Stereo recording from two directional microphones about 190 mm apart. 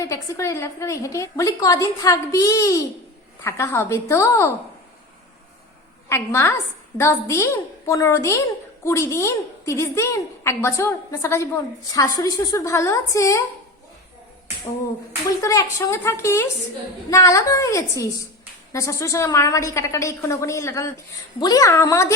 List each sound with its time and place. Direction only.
0.0 s a woman's voice: 15° left (ahead or behind)
6.1 s a woman's voice: 15° left (ahead or behind)
15.4 s a woman's voice: 15° left (ahead or behind)